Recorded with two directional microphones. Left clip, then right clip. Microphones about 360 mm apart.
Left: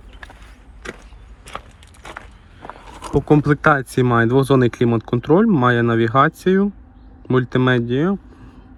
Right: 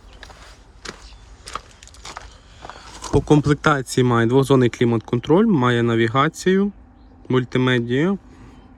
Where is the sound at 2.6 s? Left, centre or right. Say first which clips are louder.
Left 1 dB; centre.